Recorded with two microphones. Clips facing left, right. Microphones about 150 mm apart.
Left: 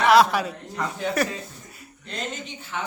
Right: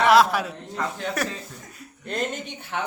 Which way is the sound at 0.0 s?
Centre (ahead or behind).